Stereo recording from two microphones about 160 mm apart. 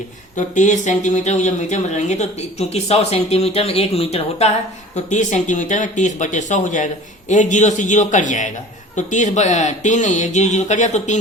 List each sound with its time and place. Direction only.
0.3 s speech: 50° left (ahead or behind)